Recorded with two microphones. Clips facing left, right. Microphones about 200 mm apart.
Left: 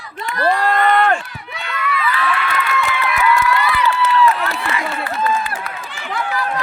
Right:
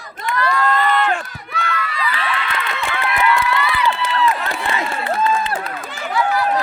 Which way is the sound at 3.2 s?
20° right (ahead or behind).